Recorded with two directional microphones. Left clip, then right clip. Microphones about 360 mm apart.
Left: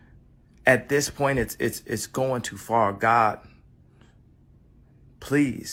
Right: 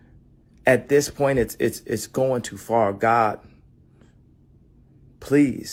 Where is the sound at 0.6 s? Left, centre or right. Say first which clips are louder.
Right 3 dB; centre.